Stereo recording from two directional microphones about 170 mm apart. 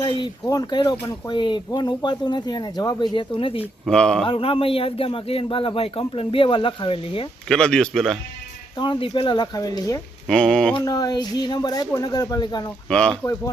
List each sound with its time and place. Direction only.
0.0 s speech: 25° left (ahead or behind)
3.8 s a man's voice: 5° left (ahead or behind)
4.3 s a man's voice: 30° left (ahead or behind)
7.4 s a man's voice: 5° left (ahead or behind)
8.8 s speech: 30° left (ahead or behind)
10.2 s a man's voice: 5° left (ahead or behind)
10.8 s speech: 25° left (ahead or behind)
12.9 s a man's voice: 5° left (ahead or behind)